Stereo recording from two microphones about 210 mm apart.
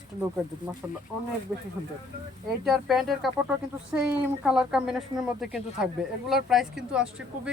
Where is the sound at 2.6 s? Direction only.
Centre (ahead or behind).